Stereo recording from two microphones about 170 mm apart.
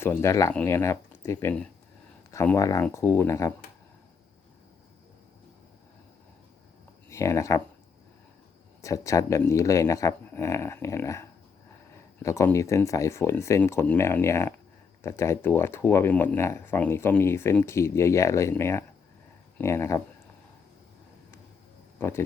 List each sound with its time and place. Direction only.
0.0 s speech: 15° left (ahead or behind)
7.1 s speech: 15° left (ahead or behind)
8.8 s speech: 20° left (ahead or behind)